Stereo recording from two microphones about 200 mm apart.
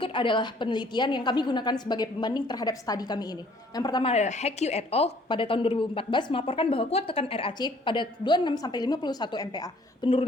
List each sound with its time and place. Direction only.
0.0 s a woman's voice: 25° left (ahead or behind)